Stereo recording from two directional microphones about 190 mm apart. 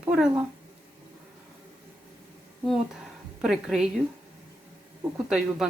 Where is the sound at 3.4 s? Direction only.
Centre (ahead or behind).